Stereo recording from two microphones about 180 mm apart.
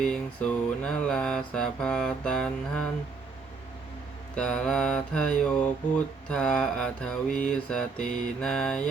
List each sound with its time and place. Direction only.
0.0 s mantra: 5° left (ahead or behind)
4.4 s mantra: 5° left (ahead or behind)